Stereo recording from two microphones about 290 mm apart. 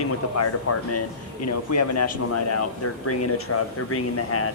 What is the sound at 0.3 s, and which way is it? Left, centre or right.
Speech, left.